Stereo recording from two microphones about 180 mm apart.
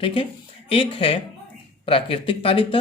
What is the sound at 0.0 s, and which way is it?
Speech, 30° left (ahead or behind).